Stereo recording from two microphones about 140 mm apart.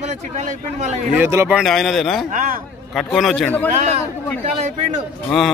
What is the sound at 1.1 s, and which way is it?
Speech, 15° right (ahead or behind).